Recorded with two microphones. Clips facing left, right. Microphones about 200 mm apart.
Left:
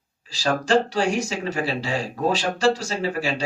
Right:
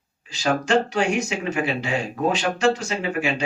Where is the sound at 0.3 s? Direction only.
35° left (ahead or behind).